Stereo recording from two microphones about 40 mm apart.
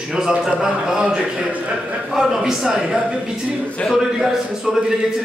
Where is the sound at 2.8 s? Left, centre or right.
Right.